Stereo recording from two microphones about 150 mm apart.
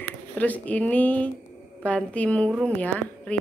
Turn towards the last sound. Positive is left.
turn(degrees=10)  # may be behind; listen again after turning